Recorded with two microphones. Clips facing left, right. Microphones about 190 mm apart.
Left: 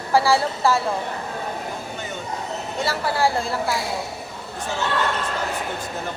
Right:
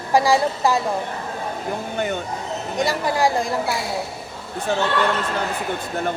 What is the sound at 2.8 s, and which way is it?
Speech, 15° right (ahead or behind).